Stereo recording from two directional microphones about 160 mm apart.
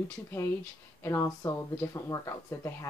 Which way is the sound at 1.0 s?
20° left (ahead or behind).